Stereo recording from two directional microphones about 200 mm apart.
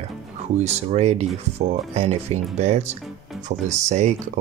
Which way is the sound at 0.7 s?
30° right (ahead or behind).